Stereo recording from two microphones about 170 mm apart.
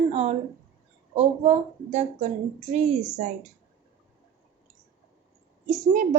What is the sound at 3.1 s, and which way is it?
Speech, 45° right (ahead or behind).